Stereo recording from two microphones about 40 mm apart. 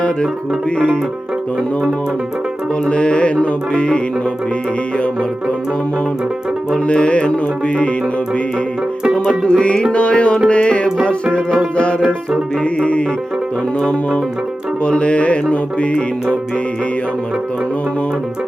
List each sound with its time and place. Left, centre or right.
2.9 s music: left
6.8 s music: left
9.4 s music: left
12.8 s music: left
14.8 s music: left